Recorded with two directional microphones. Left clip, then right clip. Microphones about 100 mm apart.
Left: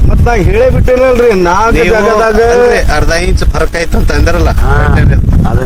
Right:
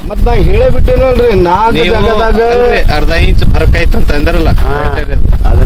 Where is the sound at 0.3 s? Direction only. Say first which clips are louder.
Left 2 dB; 30° left (ahead or behind).